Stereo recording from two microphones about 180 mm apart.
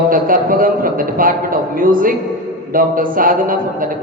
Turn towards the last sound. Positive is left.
turn(degrees=-50)  # may be behind; listen again after turning